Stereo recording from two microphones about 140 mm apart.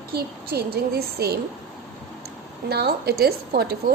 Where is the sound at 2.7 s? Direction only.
90° right.